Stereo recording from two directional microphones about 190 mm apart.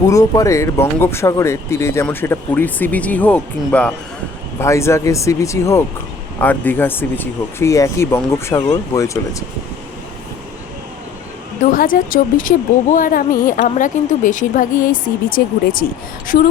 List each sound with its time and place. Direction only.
0.1 s speech: 20° left (ahead or behind)
11.6 s speech: 45° left (ahead or behind)